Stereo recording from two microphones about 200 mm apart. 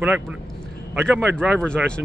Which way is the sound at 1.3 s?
5° left (ahead or behind).